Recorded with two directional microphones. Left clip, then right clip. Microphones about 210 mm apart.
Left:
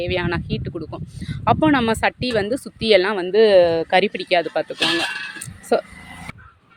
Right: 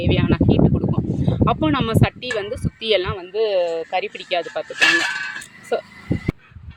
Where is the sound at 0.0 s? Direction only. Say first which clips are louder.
Right 3 dB; 10° left (ahead or behind).